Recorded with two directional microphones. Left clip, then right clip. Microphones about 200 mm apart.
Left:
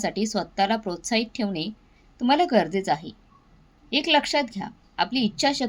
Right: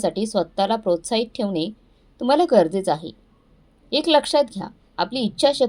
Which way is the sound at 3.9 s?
15° right (ahead or behind).